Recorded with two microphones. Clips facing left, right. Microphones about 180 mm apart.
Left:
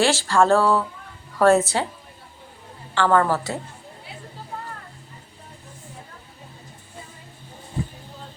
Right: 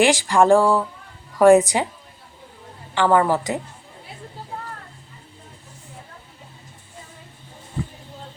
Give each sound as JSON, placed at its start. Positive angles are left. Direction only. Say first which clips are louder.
{"t": 0.0, "sound": "speech", "louder": "right 2 dB", "side_deg": -15}
{"t": 2.9, "sound": "speech", "louder": "right 2 dB", "side_deg": -15}